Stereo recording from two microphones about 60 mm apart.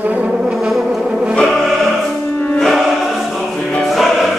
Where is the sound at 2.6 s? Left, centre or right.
Centre.